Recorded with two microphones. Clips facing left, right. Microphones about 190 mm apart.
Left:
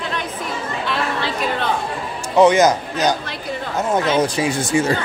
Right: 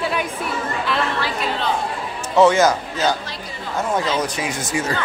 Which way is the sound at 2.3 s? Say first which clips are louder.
Left 2 dB; 20° left (ahead or behind).